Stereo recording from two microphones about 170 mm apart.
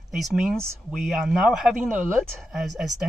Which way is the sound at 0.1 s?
Centre (ahead or behind).